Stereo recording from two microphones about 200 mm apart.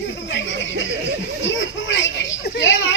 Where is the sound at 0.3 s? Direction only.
65° left (ahead or behind).